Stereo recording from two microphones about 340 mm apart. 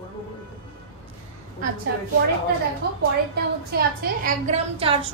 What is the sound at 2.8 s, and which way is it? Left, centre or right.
A woman's voice, right.